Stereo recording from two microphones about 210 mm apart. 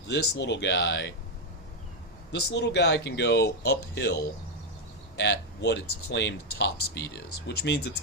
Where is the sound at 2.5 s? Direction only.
55° left (ahead or behind).